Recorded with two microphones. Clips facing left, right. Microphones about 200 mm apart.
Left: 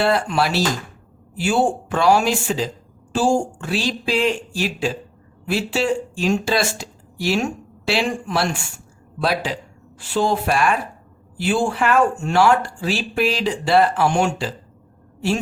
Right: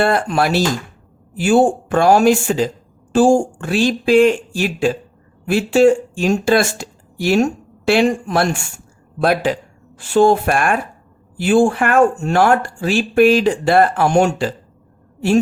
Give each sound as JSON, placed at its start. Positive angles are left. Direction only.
{"t": 0.0, "sound": "speech", "side_deg": -50}